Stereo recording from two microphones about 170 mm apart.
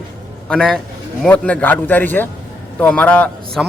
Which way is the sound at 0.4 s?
5° left (ahead or behind).